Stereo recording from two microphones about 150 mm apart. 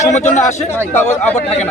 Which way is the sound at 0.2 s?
50° left (ahead or behind).